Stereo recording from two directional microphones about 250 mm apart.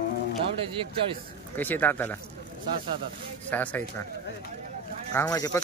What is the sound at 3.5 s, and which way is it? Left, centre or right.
Speech, centre.